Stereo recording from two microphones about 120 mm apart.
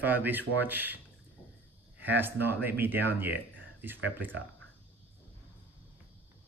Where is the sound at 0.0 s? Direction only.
15° right (ahead or behind).